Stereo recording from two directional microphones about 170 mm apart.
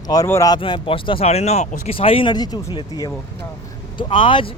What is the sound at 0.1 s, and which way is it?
Speech, 20° left (ahead or behind).